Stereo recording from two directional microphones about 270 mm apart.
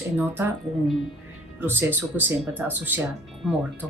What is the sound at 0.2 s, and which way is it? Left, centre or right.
Speech, centre.